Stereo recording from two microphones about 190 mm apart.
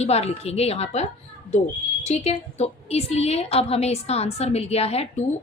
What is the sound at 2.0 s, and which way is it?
A woman's voice, 35° left (ahead or behind).